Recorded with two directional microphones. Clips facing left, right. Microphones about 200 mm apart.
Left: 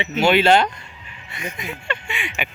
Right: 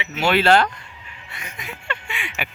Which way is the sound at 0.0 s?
25° left (ahead or behind).